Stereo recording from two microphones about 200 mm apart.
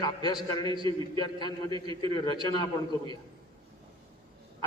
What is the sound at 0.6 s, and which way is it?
Chant, 25° right (ahead or behind).